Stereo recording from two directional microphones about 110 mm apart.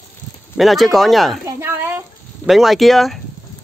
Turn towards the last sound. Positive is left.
turn(degrees=0)  # may be behind; listen again after turning